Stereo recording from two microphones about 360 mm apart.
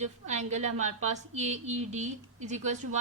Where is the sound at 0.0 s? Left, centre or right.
Centre.